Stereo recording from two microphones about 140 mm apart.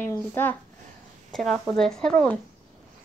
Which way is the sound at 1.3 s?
5° left (ahead or behind).